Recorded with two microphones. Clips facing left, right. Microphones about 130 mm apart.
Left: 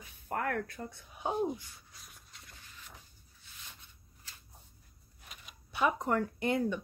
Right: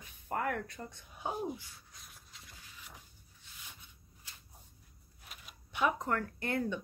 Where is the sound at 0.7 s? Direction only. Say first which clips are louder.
Left 3 dB; 5° left (ahead or behind).